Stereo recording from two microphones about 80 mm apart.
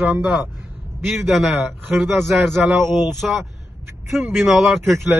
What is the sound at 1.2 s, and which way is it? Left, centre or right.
A man's voice, centre.